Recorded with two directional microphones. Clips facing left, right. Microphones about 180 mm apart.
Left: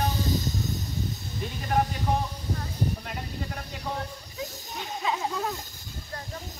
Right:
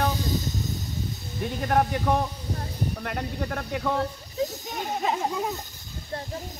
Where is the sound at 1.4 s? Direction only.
60° right (ahead or behind).